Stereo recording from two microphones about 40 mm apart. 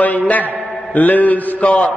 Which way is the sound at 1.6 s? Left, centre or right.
Left.